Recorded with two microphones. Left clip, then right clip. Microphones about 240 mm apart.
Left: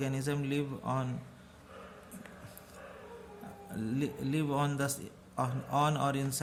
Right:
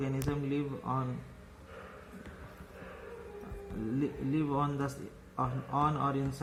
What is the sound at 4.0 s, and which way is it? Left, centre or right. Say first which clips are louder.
A man's voice: right 2 dB; left.